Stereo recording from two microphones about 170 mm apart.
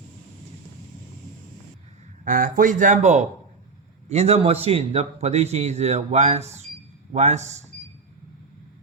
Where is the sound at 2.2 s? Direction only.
50° right (ahead or behind).